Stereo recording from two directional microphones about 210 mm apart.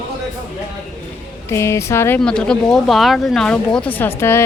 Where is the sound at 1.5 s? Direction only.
15° left (ahead or behind).